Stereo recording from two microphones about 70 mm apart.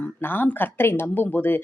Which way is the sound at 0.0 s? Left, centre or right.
Left.